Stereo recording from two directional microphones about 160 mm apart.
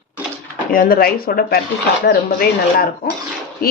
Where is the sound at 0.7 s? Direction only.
60° left (ahead or behind).